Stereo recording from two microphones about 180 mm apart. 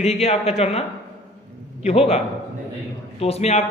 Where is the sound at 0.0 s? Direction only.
40° left (ahead or behind).